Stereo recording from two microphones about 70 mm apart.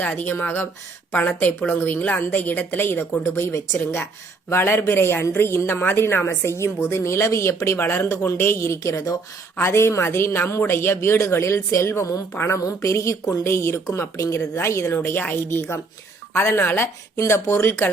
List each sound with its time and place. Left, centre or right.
0.0 s a woman's voice: left
9.6 s a woman's voice: left
15.0 s a woman's voice: left